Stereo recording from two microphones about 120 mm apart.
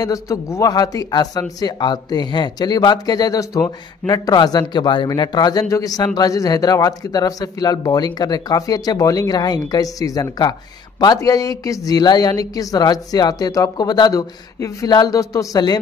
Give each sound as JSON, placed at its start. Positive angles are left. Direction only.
{"t": 0.0, "sound": "a man's voice", "side_deg": 25}